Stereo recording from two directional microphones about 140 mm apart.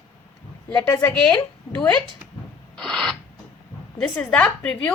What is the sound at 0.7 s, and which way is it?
Speech, 20° left (ahead or behind).